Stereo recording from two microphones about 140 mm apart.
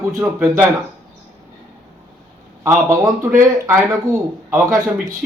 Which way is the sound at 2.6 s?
20° right (ahead or behind).